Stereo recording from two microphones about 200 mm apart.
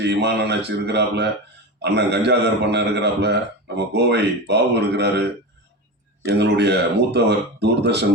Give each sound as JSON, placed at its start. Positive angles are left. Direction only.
{"t": 0.0, "sound": "speech", "side_deg": -60}
{"t": 6.2, "sound": "speech", "side_deg": -55}